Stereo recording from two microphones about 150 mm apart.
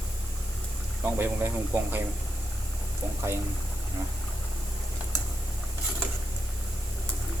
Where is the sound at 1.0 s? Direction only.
15° right (ahead or behind).